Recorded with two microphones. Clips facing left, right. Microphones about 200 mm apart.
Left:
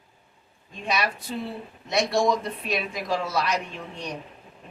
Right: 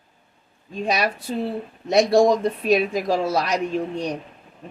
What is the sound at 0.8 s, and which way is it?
A woman's voice, 40° right (ahead or behind).